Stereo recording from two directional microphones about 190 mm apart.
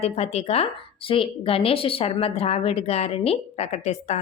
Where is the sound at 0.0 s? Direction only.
35° left (ahead or behind).